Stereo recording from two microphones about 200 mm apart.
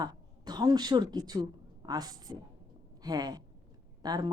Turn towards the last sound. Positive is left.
turn(degrees=-20)  # may be behind; listen again after turning